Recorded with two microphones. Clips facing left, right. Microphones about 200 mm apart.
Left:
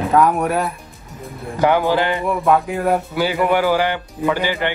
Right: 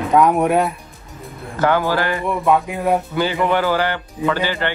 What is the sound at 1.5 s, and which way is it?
Speech, 15° left (ahead or behind).